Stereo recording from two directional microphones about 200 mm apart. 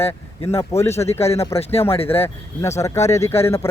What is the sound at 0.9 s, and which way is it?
Speech, 30° left (ahead or behind).